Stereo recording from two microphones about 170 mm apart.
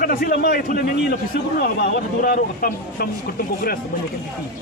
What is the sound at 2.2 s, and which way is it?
Speech, 65° left (ahead or behind).